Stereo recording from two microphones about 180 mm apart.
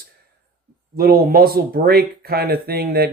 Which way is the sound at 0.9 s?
55° right (ahead or behind).